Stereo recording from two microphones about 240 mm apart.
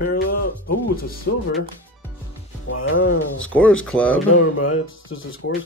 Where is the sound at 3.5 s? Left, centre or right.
Centre.